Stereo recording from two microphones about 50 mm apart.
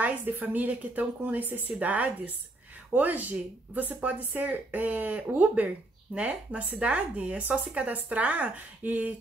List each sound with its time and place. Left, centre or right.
0.2 s speech: right